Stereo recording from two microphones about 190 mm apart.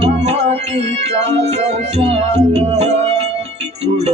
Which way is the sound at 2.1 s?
35° right (ahead or behind).